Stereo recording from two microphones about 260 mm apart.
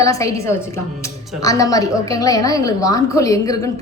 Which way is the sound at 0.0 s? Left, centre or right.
Centre.